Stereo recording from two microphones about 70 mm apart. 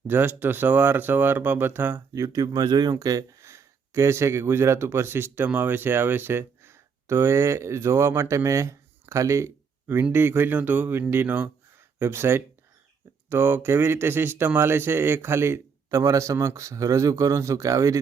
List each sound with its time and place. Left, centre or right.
0.1 s speech: right
2.1 s speech: right
2.9 s speech: right
3.4 s speech: right